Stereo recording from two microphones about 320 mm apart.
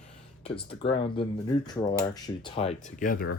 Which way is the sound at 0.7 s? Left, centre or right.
Centre.